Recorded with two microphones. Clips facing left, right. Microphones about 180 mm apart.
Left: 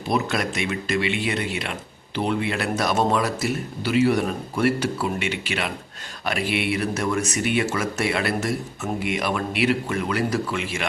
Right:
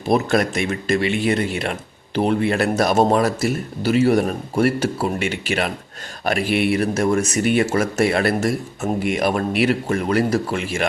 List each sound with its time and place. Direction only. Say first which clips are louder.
0.1 s speech: right 6 dB; 45° right (ahead or behind)